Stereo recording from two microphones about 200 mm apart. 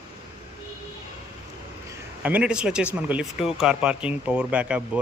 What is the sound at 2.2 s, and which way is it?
Speech, 5° right (ahead or behind).